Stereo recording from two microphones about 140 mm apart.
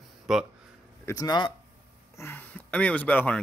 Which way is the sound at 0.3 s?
Centre (ahead or behind).